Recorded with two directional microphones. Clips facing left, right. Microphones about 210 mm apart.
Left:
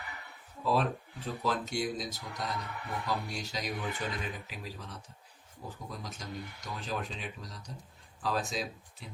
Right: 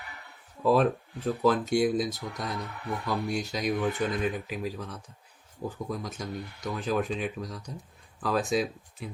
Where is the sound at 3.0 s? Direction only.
55° right (ahead or behind).